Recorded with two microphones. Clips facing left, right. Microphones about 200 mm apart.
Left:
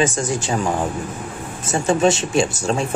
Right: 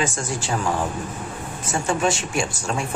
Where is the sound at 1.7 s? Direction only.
20° left (ahead or behind).